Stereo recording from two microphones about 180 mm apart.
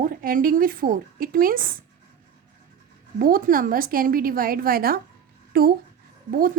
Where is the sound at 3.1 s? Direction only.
50° right (ahead or behind).